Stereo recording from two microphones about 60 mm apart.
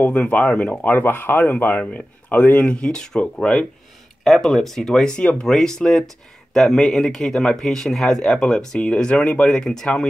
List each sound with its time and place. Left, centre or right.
0.2 s speech: centre
0.8 s speech: left; by 3.6 s centre
4.2 s speech: centre